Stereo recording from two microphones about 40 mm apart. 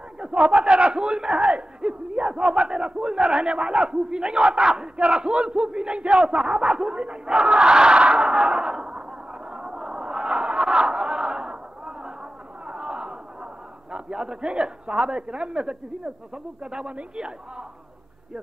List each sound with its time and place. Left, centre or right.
0.2 s speech: right
8.2 s a sound: right
13.9 s speech: right